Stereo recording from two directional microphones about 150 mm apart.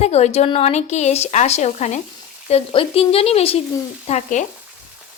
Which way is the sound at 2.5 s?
40° left (ahead or behind).